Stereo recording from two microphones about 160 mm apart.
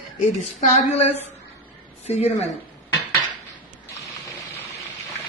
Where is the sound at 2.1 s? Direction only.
40° left (ahead or behind).